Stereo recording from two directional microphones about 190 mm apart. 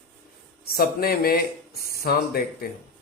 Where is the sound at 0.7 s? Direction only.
55° left (ahead or behind).